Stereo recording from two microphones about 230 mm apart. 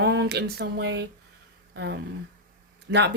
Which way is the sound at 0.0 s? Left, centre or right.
Right.